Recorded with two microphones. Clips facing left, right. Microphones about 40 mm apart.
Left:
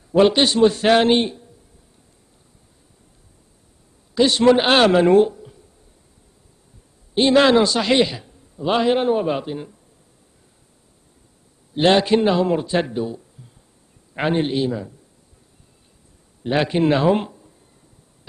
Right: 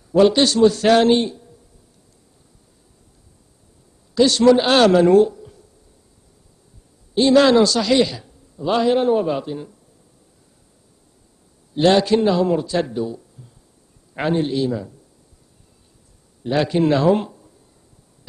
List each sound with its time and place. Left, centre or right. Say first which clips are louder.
0.1 s a man's voice: right 1 dB; left
4.1 s a man's voice: right 1 dB; left
5.3 s a sound: right 1 dB; centre
7.2 s a man's voice: right 1 dB; left
11.7 s a man's voice: even; left
14.7 s speech: right 1 dB; centre
16.4 s a man's voice: even; left